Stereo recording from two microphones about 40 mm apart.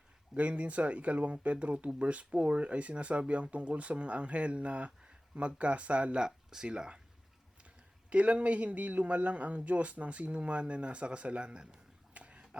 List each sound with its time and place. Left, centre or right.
0.3 s speech: right
6.2 s speech: centre
8.1 s speech: right
12.1 s a sound: right